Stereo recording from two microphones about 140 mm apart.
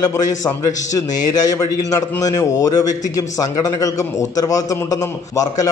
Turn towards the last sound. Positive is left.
turn(degrees=25)  # may be behind; listen again after turning